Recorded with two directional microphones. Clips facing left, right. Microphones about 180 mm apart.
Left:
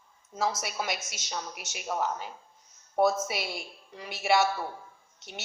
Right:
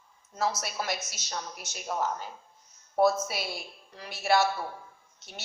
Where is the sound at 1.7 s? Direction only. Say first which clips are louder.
Even; 10° left (ahead or behind).